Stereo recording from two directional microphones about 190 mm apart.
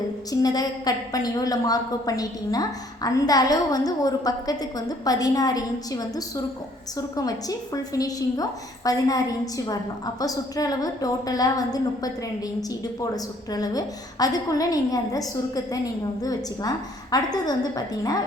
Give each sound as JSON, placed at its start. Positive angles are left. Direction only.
{"t": 0.3, "sound": "a woman's voice", "side_deg": 20}